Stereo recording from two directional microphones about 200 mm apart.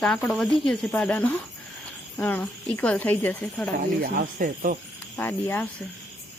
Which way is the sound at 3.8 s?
45° right (ahead or behind).